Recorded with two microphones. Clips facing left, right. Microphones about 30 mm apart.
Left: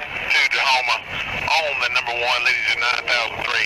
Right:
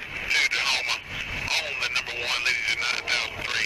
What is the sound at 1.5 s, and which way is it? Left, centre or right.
Speech, left.